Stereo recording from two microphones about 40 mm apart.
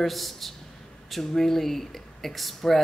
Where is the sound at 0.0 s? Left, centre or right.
Centre.